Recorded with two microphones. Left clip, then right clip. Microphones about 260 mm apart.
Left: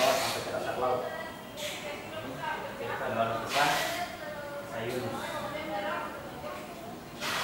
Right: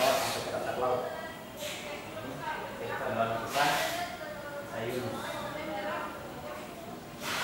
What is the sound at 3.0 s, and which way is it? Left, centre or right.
Snake, centre.